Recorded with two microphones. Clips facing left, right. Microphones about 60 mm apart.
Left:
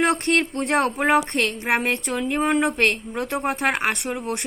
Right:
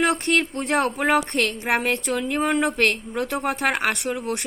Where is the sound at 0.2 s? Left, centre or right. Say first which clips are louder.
Left 1 dB; left.